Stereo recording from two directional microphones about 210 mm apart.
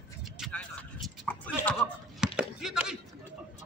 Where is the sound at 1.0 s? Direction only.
5° left (ahead or behind).